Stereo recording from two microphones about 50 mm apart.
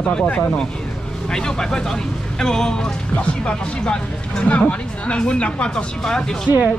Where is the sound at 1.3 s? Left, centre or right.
Centre.